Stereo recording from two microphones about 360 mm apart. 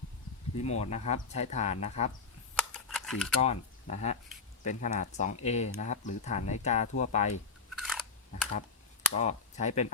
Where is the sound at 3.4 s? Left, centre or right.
Centre.